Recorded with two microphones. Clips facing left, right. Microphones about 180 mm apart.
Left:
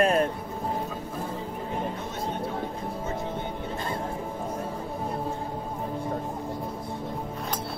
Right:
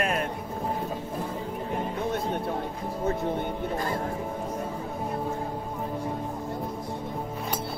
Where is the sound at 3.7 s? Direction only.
25° left (ahead or behind).